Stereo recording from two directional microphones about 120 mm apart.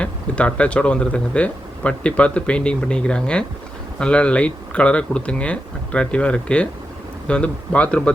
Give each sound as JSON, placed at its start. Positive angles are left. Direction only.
{"t": 0.0, "sound": "speech", "side_deg": 10}